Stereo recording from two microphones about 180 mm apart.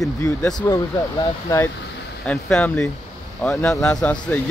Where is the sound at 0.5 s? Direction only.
20° left (ahead or behind).